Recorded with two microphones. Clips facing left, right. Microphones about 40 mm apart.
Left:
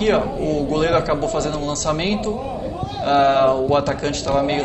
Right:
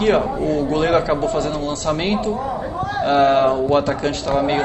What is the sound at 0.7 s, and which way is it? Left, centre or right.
A man's voice, centre.